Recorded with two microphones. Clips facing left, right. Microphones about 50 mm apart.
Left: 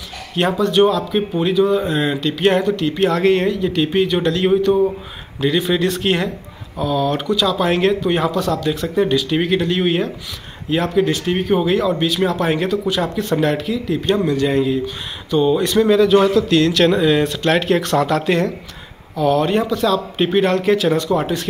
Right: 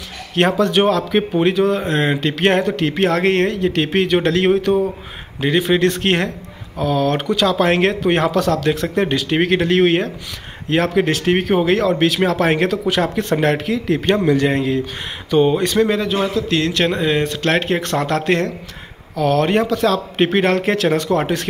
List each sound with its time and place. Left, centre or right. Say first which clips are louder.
0.4 s speech: even; right
1.8 s speech: right 1 dB; right
5.4 s speech: right 1 dB; right
5.8 s speech: right 2 dB; right
9.3 s speech: right 2 dB; right
11.5 s speech: left 2 dB; right
12.8 s speech: right 2 dB; right
15.9 s speech: left 6 dB; right
18.0 s speech: left 1 dB; right